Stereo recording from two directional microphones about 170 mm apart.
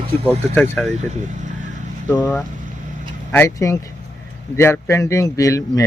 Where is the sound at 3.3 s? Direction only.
15° left (ahead or behind).